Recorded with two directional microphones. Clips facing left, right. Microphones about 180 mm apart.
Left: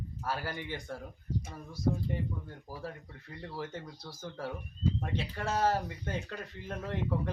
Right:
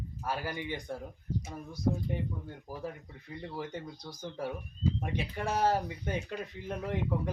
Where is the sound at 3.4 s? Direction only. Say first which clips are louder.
Right 1 dB; 15° right (ahead or behind).